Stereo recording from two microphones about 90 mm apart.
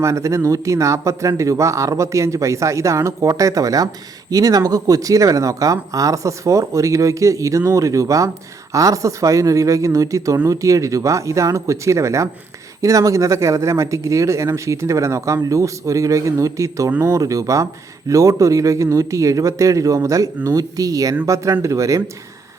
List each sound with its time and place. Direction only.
0.0 s speech: 35° right (ahead or behind)